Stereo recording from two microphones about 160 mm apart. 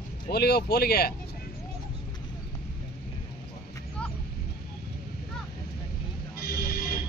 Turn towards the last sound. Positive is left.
turn(degrees=65)  # may be behind; listen again after turning